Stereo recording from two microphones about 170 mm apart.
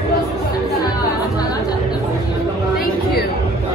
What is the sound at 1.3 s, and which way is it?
Music, 20° left (ahead or behind).